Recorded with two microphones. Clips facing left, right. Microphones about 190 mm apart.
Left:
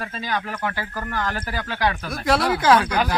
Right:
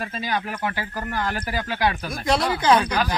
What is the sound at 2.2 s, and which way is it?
Speech, 5° left (ahead or behind).